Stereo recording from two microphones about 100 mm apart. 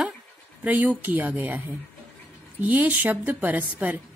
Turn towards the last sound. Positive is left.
turn(degrees=-15)  # may be behind; listen again after turning